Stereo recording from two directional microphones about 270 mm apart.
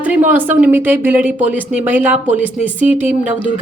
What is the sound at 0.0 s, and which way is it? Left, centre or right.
A woman's voice, centre.